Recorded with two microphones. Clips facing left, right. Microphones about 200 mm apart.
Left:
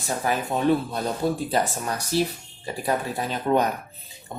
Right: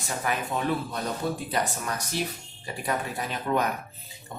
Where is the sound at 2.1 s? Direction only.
35° left (ahead or behind).